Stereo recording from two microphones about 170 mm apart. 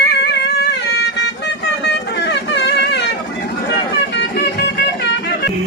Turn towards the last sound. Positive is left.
turn(degrees=80)